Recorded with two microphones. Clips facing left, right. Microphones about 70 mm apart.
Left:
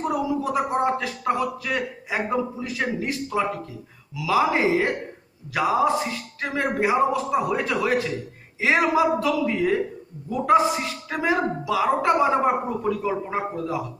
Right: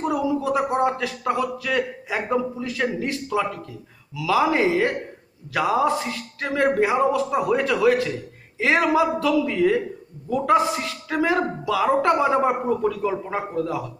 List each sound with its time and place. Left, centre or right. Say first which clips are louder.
0.4 s speech: right 1 dB; left